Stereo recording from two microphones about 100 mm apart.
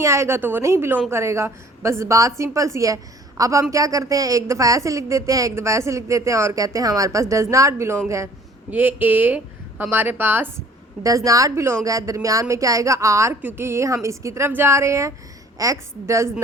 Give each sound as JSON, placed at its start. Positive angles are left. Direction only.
{"t": 0.0, "sound": "a woman's voice", "side_deg": -30}
{"t": 8.7, "sound": "speech", "side_deg": -20}
{"t": 11.0, "sound": "a woman's voice", "side_deg": -35}